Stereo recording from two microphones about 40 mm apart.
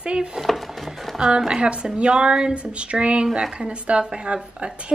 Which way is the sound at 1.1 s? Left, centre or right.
Right.